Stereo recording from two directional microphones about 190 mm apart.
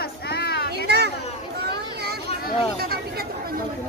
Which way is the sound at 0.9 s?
60° right (ahead or behind).